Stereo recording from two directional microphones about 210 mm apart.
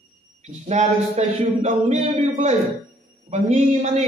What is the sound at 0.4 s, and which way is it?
Speech, 35° right (ahead or behind).